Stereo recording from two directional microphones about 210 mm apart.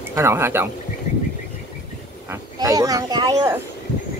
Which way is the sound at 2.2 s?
15° right (ahead or behind).